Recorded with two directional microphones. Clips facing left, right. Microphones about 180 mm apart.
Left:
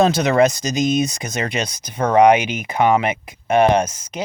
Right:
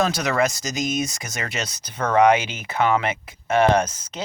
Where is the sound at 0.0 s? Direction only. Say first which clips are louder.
Left 7 dB; 25° left (ahead or behind).